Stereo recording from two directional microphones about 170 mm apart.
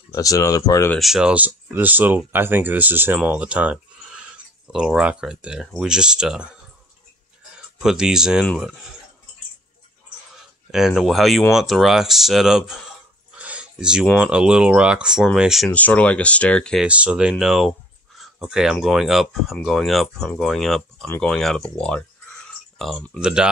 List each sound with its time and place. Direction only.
0.1 s speech: 20° left (ahead or behind)
0.9 s speech: centre (ahead or behind)
10.3 s speech: 5° right (ahead or behind)
13.4 s a sound: 5° right (ahead or behind)
14.1 s speech: 5° right (ahead or behind)
16.8 s speech: 5° right (ahead or behind)